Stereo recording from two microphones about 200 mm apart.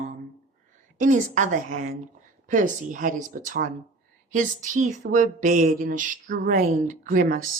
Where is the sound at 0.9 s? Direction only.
40° right (ahead or behind).